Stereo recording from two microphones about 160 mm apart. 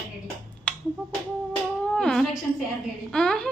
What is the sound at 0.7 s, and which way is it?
Finger snapping, 10° left (ahead or behind).